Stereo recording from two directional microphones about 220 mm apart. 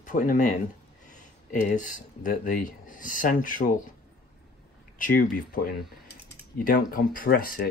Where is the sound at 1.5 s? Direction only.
35° left (ahead or behind).